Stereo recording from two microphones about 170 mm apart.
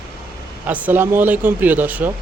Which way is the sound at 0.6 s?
10° right (ahead or behind).